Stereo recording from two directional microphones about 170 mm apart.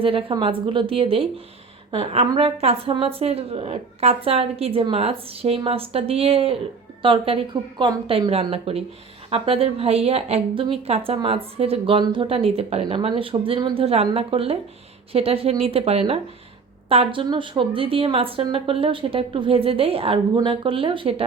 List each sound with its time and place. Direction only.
0.0 s a woman's voice: 35° right (ahead or behind)